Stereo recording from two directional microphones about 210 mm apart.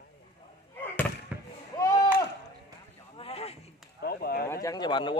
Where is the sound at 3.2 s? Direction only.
30° left (ahead or behind).